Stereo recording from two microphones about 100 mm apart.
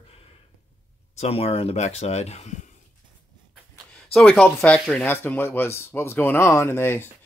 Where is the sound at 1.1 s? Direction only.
90° left.